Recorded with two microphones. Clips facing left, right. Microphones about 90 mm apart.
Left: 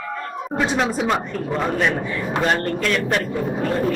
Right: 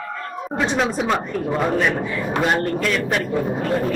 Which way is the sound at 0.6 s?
Centre (ahead or behind).